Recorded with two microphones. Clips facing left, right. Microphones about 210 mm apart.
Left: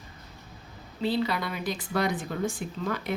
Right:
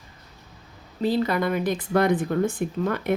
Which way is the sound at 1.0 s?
45° right (ahead or behind).